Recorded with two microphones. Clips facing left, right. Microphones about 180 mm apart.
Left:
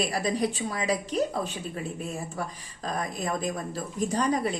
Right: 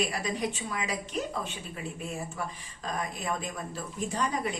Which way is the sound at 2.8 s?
35° left (ahead or behind).